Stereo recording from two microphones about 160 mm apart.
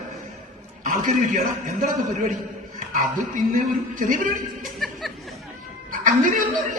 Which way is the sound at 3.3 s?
55° right (ahead or behind).